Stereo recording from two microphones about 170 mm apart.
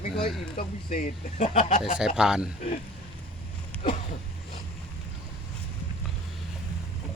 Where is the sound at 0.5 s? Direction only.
55° left (ahead or behind).